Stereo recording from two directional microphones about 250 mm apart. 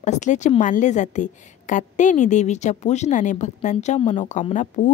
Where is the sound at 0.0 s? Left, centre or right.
Left.